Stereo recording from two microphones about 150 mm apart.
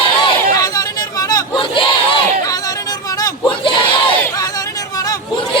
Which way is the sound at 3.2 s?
25° left (ahead or behind).